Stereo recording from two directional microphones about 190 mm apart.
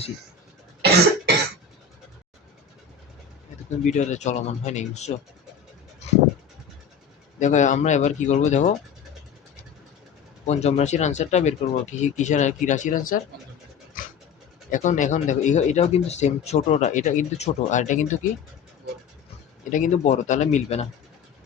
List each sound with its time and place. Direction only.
0.8 s cough: 60° right (ahead or behind)
3.8 s speech: 40° left (ahead or behind)
7.3 s speech: 40° left (ahead or behind)
10.4 s speech: 35° left (ahead or behind)
14.0 s a sound: 45° left (ahead or behind)
14.7 s speech: 40° left (ahead or behind)
19.7 s speech: 40° left (ahead or behind)